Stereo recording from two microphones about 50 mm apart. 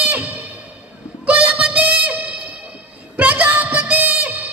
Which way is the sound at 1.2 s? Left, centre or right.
Right.